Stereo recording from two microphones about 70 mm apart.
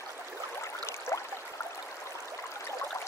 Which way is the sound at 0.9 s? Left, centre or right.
Left.